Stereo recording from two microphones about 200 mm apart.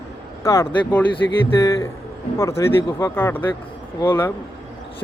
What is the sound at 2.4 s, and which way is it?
Speech, 15° left (ahead or behind).